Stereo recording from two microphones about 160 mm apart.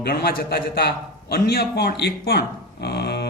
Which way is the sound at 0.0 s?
80° left.